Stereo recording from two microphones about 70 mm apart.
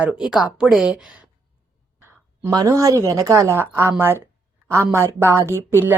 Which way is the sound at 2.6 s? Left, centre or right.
Right.